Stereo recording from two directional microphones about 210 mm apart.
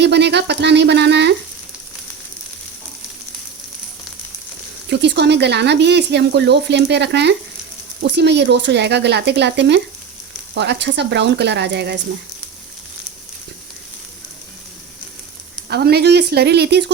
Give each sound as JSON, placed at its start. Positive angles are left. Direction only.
{"t": 0.0, "sound": "speech", "side_deg": -55}
{"t": 4.9, "sound": "speech", "side_deg": -55}
{"t": 15.7, "sound": "speech", "side_deg": -50}